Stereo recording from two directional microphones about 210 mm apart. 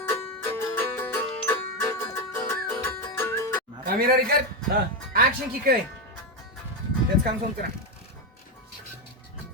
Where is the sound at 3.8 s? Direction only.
45° right (ahead or behind).